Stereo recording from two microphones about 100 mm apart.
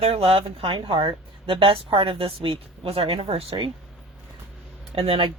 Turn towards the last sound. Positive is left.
turn(degrees=-65)  # may be behind; listen again after turning